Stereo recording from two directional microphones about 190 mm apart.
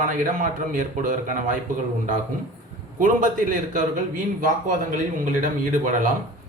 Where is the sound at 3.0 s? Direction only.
45° right (ahead or behind).